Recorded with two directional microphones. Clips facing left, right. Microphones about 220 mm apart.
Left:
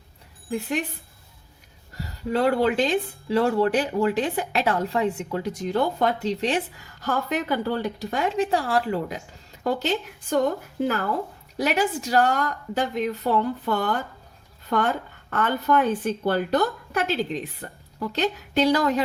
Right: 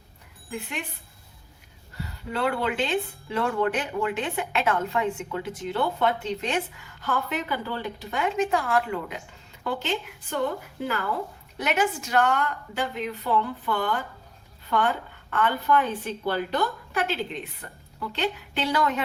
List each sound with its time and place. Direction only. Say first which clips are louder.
0.5 s speech: left 8 dB; 40° left (ahead or behind)
2.0 s a woman's voice: left 5 dB; 40° left (ahead or behind)